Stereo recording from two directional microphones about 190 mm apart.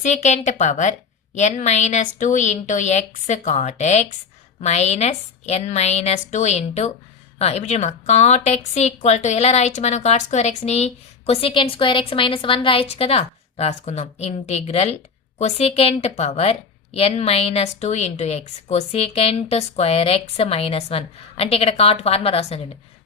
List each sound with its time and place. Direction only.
0.0 s a woman's voice: 40° left (ahead or behind)